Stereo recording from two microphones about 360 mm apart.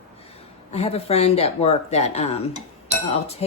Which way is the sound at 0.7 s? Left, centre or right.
Centre.